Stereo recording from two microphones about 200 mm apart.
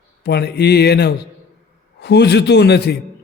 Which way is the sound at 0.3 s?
55° left (ahead or behind).